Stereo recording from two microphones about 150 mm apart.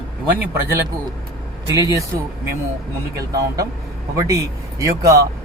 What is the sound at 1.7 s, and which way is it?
Speech, 20° right (ahead or behind).